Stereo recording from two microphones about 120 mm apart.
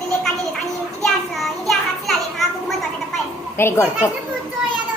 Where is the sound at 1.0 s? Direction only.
Centre (ahead or behind).